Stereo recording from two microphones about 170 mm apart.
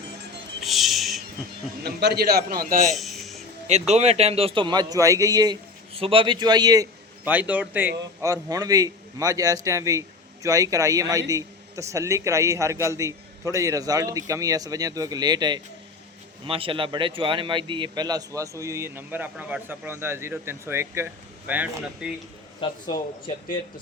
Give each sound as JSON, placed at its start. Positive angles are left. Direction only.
{"t": 0.6, "sound": "music", "side_deg": 0}
{"t": 1.8, "sound": "a man's voice", "side_deg": -75}
{"t": 2.9, "sound": "a sound", "side_deg": 0}
{"t": 3.7, "sound": "a man's voice", "side_deg": -40}
{"t": 7.3, "sound": "a man's voice", "side_deg": -10}
{"t": 22.6, "sound": "speech", "side_deg": 30}